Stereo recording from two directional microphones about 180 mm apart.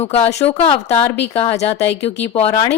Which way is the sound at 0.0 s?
35° left (ahead or behind).